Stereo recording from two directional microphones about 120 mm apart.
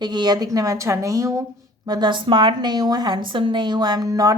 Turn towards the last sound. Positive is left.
turn(degrees=-30)  # may be behind; listen again after turning